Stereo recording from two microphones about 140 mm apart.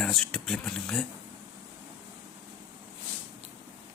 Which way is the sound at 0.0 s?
5° left (ahead or behind).